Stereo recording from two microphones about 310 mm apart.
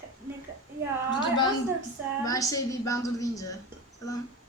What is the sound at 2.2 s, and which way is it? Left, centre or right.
A woman's voice, centre.